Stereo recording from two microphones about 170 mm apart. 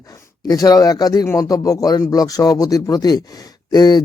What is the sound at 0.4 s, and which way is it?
Speech, 20° left (ahead or behind).